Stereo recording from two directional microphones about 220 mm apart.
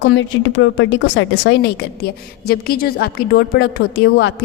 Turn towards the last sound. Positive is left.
turn(degrees=50)  # may be behind; listen again after turning